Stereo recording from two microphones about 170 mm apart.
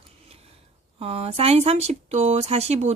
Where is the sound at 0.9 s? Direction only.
35° right (ahead or behind).